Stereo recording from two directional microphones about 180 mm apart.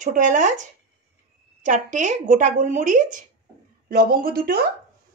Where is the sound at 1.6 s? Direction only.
40° right (ahead or behind).